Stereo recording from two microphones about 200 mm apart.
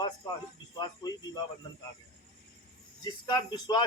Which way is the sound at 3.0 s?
20° left (ahead or behind).